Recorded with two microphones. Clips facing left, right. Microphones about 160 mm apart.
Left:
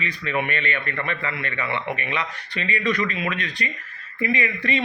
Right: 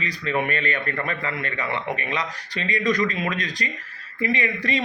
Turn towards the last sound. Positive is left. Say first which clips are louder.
# even
turn(degrees=-35)  # may be behind; listen again after turning